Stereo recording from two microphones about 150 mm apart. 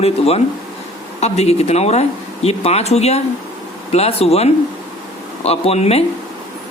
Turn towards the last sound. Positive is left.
turn(degrees=45)  # may be behind; listen again after turning